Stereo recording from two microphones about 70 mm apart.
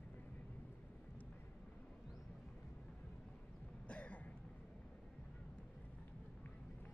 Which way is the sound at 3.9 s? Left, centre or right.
Centre.